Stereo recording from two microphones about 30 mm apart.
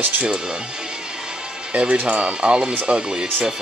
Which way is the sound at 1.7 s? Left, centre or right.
Right.